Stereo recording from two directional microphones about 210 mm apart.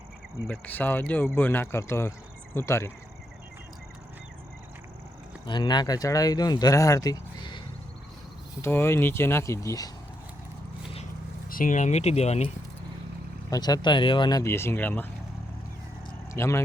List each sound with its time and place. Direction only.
0.4 s speech: 5° left (ahead or behind)
5.5 s speech: 20° left (ahead or behind)
8.6 s speech: 10° left (ahead or behind)
11.4 s speech: 40° left (ahead or behind)
13.5 s speech: 20° left (ahead or behind)
16.3 s speech: 15° left (ahead or behind)